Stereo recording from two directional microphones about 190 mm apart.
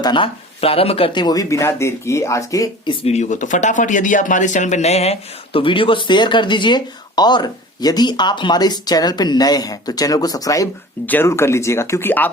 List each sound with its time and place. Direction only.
0.0 s speech: 25° left (ahead or behind); by 12.3 s 10° left (ahead or behind)